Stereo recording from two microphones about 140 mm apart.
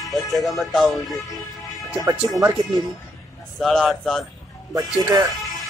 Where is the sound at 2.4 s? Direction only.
30° right (ahead or behind).